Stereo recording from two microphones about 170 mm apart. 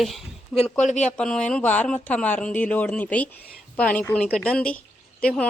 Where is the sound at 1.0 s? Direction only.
5° left (ahead or behind).